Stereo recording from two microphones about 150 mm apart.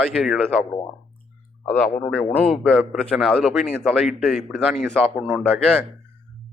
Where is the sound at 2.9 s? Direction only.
5° left (ahead or behind).